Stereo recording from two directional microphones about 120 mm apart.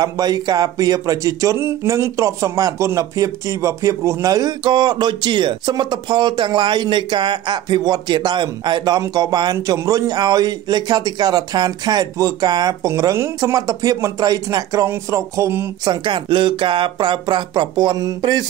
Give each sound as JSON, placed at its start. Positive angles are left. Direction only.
{"t": 0.0, "sound": "speech", "side_deg": -35}
{"t": 15.8, "sound": "speech", "side_deg": -40}